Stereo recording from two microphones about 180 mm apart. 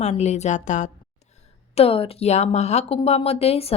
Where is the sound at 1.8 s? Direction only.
30° left (ahead or behind).